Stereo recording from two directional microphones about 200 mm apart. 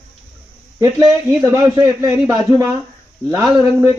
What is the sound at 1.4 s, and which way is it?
Speech, 15° right (ahead or behind).